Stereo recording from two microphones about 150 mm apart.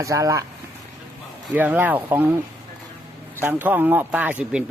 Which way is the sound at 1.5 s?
10° right (ahead or behind).